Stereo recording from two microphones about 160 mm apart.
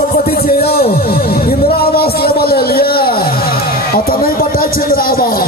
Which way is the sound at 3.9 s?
65° left (ahead or behind).